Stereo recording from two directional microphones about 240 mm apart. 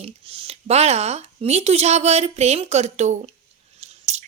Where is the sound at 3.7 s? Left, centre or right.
Right.